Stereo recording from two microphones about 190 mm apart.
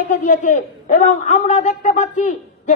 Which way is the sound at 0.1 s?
40° left (ahead or behind).